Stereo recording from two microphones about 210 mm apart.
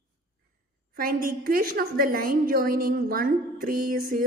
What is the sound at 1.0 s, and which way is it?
A woman's voice, 45° right (ahead or behind).